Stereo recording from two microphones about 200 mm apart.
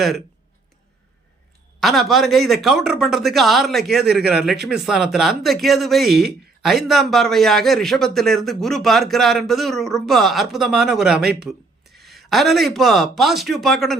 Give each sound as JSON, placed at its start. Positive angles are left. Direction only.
{"t": 1.8, "sound": "speech", "side_deg": 0}
{"t": 11.2, "sound": "speech", "side_deg": -55}
{"t": 12.0, "sound": "speech", "side_deg": 0}